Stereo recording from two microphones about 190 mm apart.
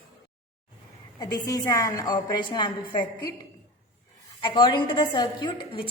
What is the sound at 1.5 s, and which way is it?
A woman's voice, 15° left (ahead or behind).